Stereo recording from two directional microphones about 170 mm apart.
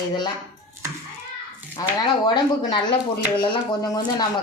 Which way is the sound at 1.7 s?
25° left (ahead or behind).